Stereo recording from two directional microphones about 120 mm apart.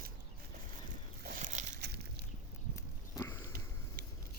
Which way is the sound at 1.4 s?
90° right.